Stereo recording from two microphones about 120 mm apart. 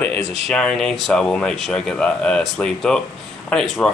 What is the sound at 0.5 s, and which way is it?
Speech, 5° left (ahead or behind).